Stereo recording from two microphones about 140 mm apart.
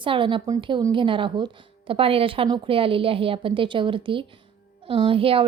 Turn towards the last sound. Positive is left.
turn(degrees=-40)  # may be behind; listen again after turning